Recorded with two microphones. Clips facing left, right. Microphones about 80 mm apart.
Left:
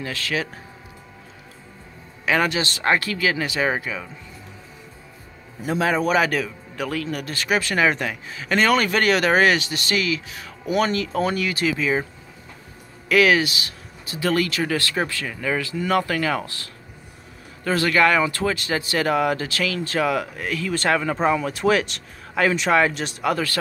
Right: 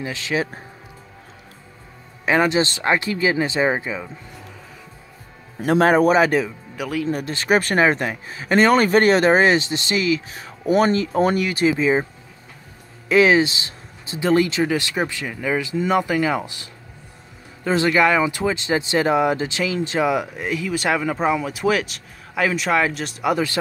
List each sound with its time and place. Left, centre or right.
0.0 s speech: centre
2.2 s speech: right
5.8 s speech: right
6.0 s speech: right
6.8 s speech: centre
7.1 s speech: right
11.3 s speech: centre
11.6 s speech: right
13.1 s speech: right; by 23.1 s centre
23.2 s speech: centre